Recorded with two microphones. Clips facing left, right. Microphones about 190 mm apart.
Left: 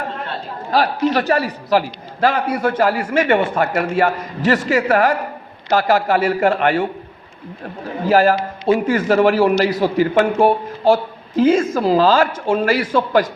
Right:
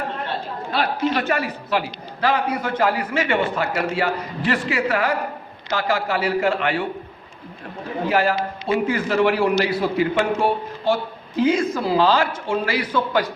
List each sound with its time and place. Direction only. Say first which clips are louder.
0.7 s a man's voice: left 5 dB; 40° left (ahead or behind)
8.0 s a man's voice: left 6 dB; 45° left (ahead or behind)